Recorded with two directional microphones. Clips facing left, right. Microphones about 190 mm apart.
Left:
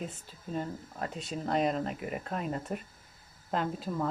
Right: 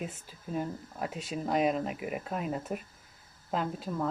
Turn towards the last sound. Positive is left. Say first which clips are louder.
# even
turn(degrees=0)  # may be behind; listen again after turning